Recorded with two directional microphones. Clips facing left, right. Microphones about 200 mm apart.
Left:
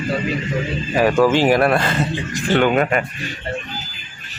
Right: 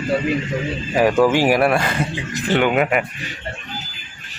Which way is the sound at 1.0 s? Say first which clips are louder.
Even; 15° right (ahead or behind).